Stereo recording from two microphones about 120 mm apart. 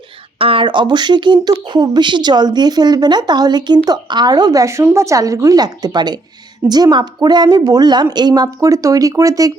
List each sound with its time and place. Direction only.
0.3 s speech: 50° right (ahead or behind); by 9.5 s 30° right (ahead or behind)